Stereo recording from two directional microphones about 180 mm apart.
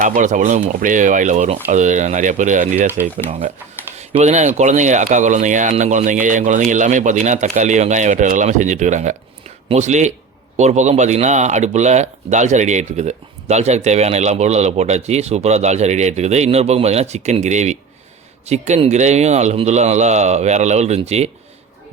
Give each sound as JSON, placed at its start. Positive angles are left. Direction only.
{"t": 0.0, "sound": "speech", "side_deg": -45}
{"t": 3.2, "sound": "speech", "side_deg": -30}